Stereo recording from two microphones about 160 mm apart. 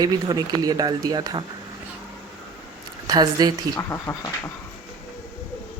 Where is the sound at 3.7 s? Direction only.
15° left (ahead or behind).